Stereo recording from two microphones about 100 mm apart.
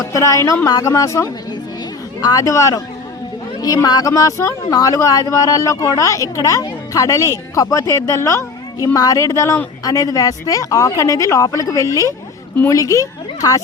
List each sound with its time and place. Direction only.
0.0 s a woman's voice: 30° left (ahead or behind)